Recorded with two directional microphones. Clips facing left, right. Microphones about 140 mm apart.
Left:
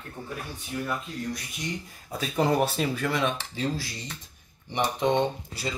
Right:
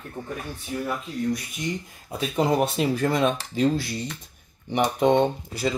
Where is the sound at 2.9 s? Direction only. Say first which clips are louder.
Right 5 dB; 40° right (ahead or behind).